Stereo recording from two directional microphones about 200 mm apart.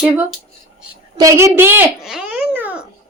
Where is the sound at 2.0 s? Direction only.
Centre (ahead or behind).